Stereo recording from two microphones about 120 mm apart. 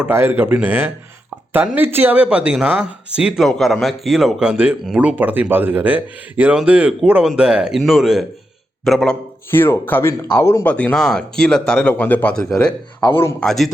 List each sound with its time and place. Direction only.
0.0 s speech: 20° right (ahead or behind); by 9.1 s centre (ahead or behind)
9.5 s speech: 20° left (ahead or behind)
10.7 s speech: 10° left (ahead or behind)